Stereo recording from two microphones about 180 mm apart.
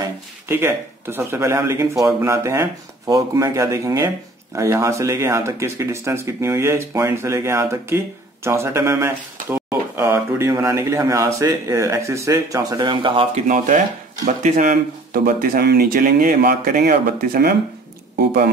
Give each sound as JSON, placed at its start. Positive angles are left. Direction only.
{"t": 0.0, "sound": "speech", "side_deg": -15}
{"t": 14.2, "sound": "speech", "side_deg": -40}